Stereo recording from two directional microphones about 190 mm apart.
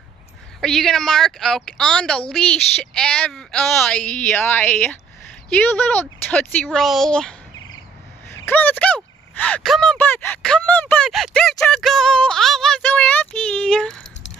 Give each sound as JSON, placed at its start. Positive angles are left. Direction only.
{"t": 0.6, "sound": "speech", "side_deg": 0}
{"t": 8.5, "sound": "speech", "side_deg": 10}